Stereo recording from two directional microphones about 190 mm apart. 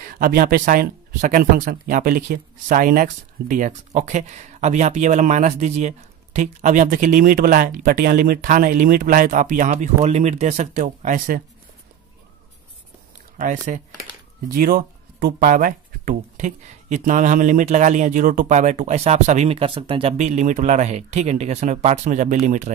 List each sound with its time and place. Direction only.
0.0 s speech: 50° right (ahead or behind)
13.7 s speech: 40° right (ahead or behind)
14.5 s speech: 50° right (ahead or behind)